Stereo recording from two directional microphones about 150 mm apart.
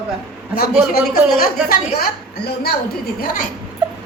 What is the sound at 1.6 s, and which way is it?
A woman's voice, 90° left.